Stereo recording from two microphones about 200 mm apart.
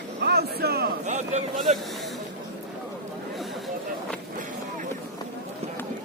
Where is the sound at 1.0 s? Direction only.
35° right (ahead or behind).